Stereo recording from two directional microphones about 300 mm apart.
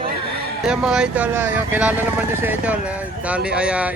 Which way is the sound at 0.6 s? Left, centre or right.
Centre.